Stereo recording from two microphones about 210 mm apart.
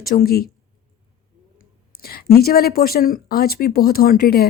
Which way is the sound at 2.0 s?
45° left (ahead or behind).